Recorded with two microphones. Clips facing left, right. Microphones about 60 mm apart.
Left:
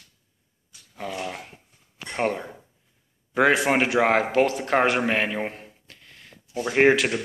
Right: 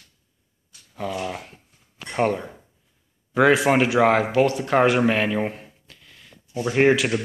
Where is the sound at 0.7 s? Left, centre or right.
Centre.